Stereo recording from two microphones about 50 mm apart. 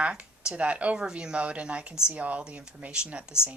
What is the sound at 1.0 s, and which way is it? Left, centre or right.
Speech, centre.